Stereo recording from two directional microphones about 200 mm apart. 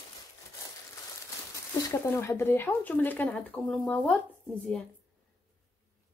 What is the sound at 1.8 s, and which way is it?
Speech, 15° left (ahead or behind).